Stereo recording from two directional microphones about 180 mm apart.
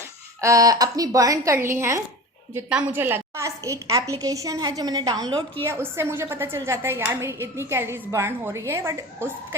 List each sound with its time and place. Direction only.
0.4 s a woman's voice: 20° right (ahead or behind)